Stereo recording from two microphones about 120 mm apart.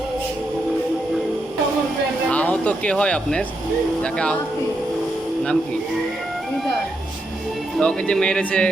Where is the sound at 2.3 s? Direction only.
10° left (ahead or behind).